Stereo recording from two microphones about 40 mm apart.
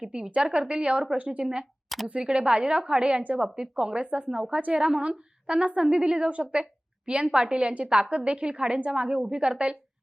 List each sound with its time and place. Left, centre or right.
0.0 s a woman's voice: right
0.7 s a woman's voice: right
3.3 s a woman's voice: right
4.3 s a woman's voice: centre
4.5 s a woman's voice: right